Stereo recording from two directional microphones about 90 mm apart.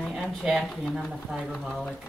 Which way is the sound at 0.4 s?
10° right (ahead or behind).